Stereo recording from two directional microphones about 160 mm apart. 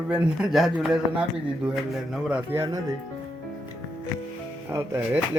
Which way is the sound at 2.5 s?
20° right (ahead or behind).